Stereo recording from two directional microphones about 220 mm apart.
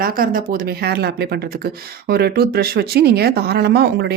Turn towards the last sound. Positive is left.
turn(degrees=-50)  # may be behind; listen again after turning